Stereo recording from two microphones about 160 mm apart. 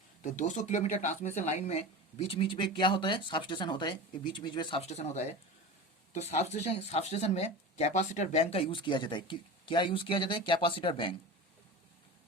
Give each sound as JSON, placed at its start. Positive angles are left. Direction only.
{"t": 0.2, "sound": "speech", "side_deg": 50}
{"t": 2.1, "sound": "speech", "side_deg": 35}
{"t": 4.8, "sound": "speech", "side_deg": 45}